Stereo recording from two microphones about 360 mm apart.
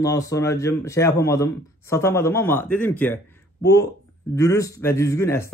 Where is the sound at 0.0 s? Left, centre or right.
Centre.